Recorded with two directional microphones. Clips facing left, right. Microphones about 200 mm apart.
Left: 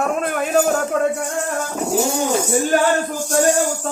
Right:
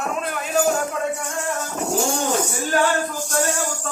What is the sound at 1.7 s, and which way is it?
Vehicle, 10° left (ahead or behind).